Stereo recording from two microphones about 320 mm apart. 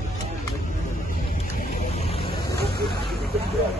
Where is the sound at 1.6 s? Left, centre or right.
Centre.